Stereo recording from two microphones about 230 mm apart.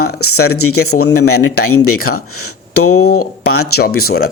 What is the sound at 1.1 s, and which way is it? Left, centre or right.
Speech, left.